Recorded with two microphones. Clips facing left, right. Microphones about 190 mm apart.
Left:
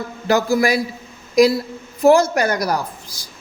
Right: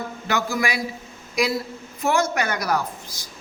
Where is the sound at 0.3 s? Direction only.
35° left (ahead or behind).